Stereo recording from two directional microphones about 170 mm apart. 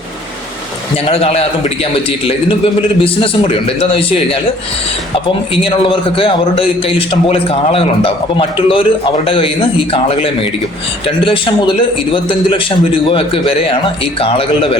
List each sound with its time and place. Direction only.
0.9 s a man's voice: 35° left (ahead or behind)
5.6 s a man's voice: 30° left (ahead or behind)